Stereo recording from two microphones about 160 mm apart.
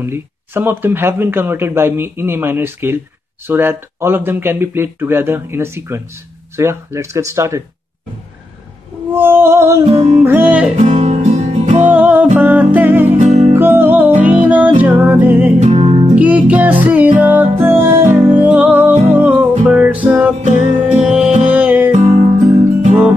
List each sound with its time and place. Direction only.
0.0 s speech: 15° right (ahead or behind)
9.1 s speech: 10° right (ahead or behind)
10.8 s music: 50° right (ahead or behind)
11.9 s music: 10° right (ahead or behind)
13.2 s music: 45° right (ahead or behind)
13.6 s music: 15° right (ahead or behind)
15.6 s music: 40° right (ahead or behind)
16.2 s speech: 10° right (ahead or behind)
16.8 s music: 10° right (ahead or behind)
21.9 s music: 45° right (ahead or behind)